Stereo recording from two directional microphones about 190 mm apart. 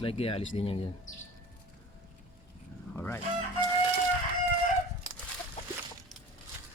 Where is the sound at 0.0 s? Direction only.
30° left (ahead or behind).